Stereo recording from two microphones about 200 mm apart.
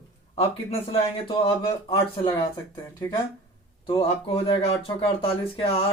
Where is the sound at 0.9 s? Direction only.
30° left (ahead or behind).